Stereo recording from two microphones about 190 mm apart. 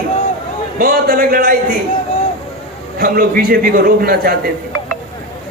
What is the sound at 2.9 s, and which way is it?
A man's voice, 50° right (ahead or behind).